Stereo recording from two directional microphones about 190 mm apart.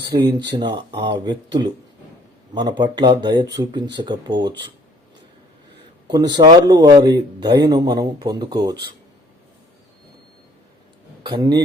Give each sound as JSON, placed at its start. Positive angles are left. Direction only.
{"t": 0.3, "sound": "speech", "side_deg": -20}
{"t": 6.1, "sound": "speech", "side_deg": -20}
{"t": 11.2, "sound": "a man's voice", "side_deg": -20}